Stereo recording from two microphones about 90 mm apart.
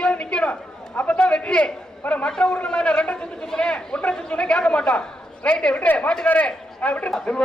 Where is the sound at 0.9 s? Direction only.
15° left (ahead or behind).